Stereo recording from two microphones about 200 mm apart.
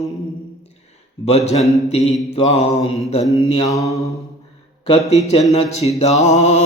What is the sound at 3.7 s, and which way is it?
Mantra, 15° left (ahead or behind).